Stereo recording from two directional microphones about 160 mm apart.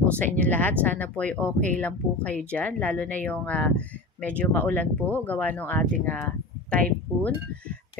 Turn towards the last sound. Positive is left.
turn(degrees=10)  # may be behind; listen again after turning